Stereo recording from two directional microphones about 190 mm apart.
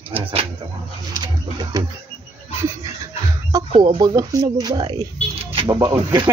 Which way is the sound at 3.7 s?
30° right (ahead or behind).